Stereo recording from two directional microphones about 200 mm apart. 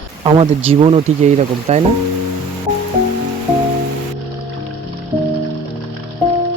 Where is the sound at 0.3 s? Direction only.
25° right (ahead or behind).